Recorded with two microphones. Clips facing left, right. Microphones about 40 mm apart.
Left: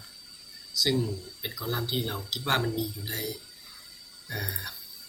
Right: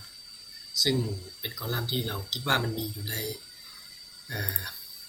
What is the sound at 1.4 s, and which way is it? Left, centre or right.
Speech, centre.